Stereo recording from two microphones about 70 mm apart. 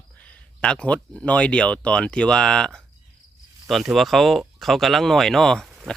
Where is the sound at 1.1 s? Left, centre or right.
Centre.